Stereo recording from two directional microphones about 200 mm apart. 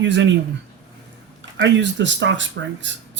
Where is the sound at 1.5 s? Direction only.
60° right (ahead or behind).